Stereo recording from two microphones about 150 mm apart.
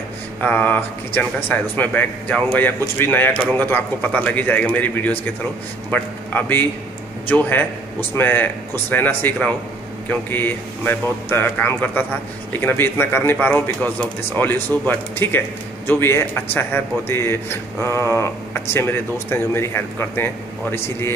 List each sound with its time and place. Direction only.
0.4 s a man's voice: 10° left (ahead or behind)